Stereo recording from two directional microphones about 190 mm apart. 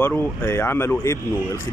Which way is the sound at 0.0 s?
10° left (ahead or behind).